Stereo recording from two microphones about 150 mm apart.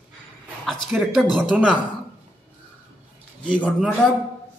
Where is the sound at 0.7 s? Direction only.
5° right (ahead or behind).